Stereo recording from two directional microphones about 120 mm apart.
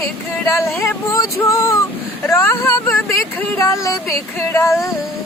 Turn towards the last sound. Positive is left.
turn(degrees=25)  # may be behind; listen again after turning